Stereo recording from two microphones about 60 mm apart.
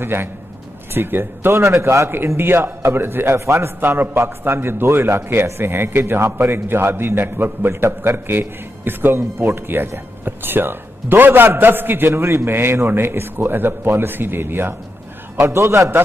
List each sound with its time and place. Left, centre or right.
0.0 s a man's voice: right
1.6 s a man's voice: right
2.1 s a man's voice: right
3.3 s a man's voice: right
3.8 s a man's voice: right
15.4 s a man's voice: right